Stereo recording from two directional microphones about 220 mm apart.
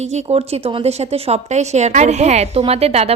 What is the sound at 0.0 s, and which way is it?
A woman's voice, 30° right (ahead or behind).